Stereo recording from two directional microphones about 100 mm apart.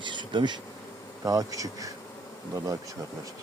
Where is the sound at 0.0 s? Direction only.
50° right (ahead or behind).